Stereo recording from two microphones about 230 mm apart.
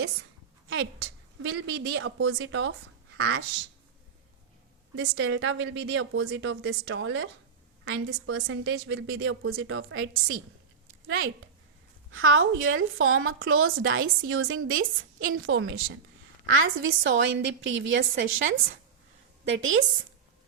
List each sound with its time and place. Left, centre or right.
1.4 s a woman's voice: right
4.9 s a woman's voice: right
7.9 s a woman's voice: right